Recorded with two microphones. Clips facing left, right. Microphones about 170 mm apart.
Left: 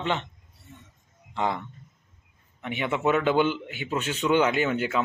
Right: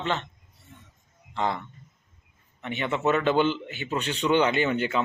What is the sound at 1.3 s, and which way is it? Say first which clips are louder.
Speech: even; 15° left (ahead or behind).